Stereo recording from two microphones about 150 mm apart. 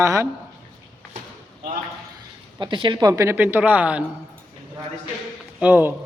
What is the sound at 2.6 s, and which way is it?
Speech, 30° right (ahead or behind).